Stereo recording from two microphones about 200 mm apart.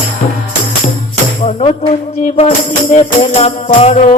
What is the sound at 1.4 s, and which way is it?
Music, 30° left (ahead or behind).